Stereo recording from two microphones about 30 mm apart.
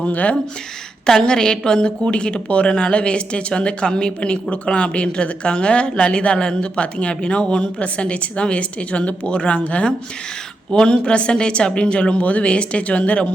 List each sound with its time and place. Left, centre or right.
1.0 s a woman's voice: left
2.6 s a woman's voice: left
9.6 s speech: left
10.7 s speech: left